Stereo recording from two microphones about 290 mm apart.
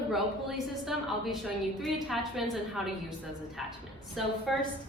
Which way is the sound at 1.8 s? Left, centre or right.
Centre.